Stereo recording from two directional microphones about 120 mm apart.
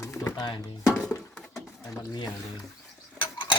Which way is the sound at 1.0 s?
Centre (ahead or behind).